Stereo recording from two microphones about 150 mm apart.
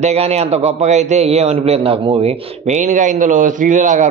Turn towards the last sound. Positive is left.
turn(degrees=-55)  # may be behind; listen again after turning